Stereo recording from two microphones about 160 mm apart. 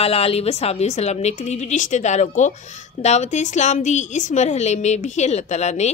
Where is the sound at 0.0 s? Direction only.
40° left (ahead or behind).